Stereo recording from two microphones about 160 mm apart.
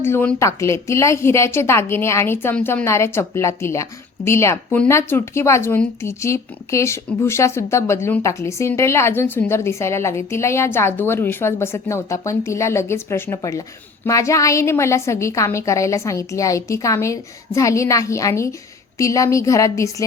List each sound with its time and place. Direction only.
0.0 s a woman's voice: 15° left (ahead or behind)